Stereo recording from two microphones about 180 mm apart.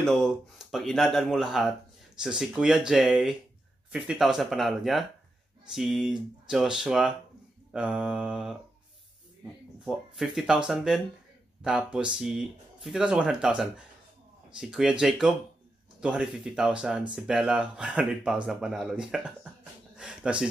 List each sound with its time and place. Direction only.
0.0 s speech: centre (ahead or behind)
9.8 s speech: centre (ahead or behind)
20.0 s a sound: 5° right (ahead or behind)